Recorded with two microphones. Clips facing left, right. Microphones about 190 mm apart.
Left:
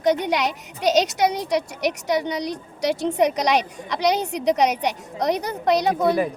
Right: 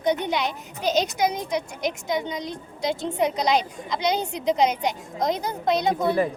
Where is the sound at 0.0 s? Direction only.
80° left.